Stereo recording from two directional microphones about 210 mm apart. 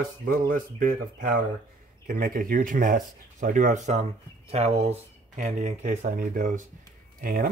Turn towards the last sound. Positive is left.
turn(degrees=-45)  # may be behind; listen again after turning